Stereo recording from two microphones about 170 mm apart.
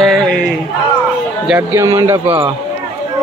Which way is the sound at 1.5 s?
15° right (ahead or behind).